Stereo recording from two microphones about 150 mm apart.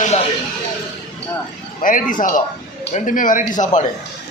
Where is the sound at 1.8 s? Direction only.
65° left (ahead or behind).